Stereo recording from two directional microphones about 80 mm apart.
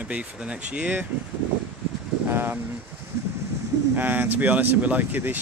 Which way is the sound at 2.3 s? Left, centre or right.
Right.